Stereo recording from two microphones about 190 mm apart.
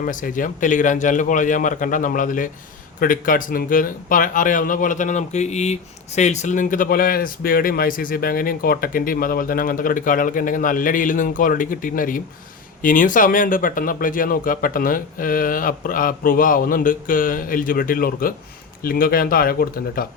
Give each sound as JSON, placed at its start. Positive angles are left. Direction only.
{"t": 0.0, "sound": "speech", "side_deg": 45}